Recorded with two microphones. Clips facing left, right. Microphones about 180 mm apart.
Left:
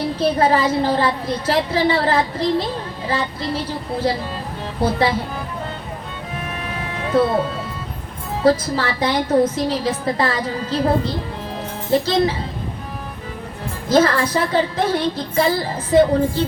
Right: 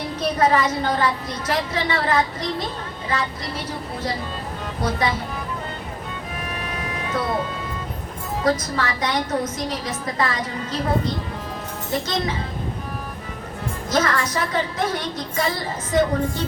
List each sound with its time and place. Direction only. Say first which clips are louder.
0.2 s a woman's voice: left 2 dB; 30° left (ahead or behind)
4.8 s a woman's voice: left 5 dB; 30° left (ahead or behind)
7.1 s a woman's voice: left 10 dB; 30° left (ahead or behind)
8.4 s a woman's voice: left 6 dB; 30° left (ahead or behind)
13.8 s a woman's voice: left 6 dB; 30° left (ahead or behind)